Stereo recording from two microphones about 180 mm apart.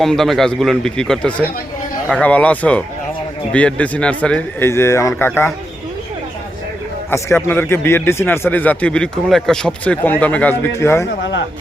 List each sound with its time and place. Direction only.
0.0 s a man's voice: centre (ahead or behind)
7.1 s speech: 15° left (ahead or behind)
11.2 s speech: 75° left (ahead or behind)